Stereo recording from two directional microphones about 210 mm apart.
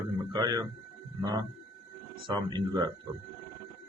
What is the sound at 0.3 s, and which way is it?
Speech, 15° right (ahead or behind).